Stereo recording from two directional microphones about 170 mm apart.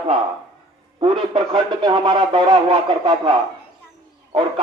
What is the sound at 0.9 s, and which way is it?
Speech, 30° right (ahead or behind).